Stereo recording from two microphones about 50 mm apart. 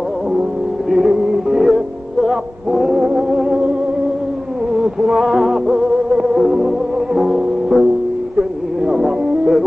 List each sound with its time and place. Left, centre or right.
0.8 s music: centre
1.1 s music: centre
4.7 s music: centre
8.4 s a sound: centre